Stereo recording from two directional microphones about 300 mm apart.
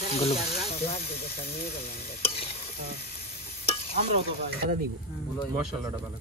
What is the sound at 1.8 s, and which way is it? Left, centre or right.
Stir, centre.